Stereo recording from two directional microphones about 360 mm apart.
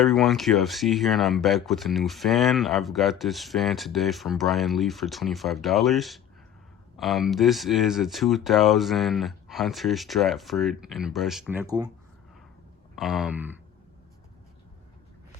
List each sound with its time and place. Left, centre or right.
0.0 s speech: centre
13.0 s speech: centre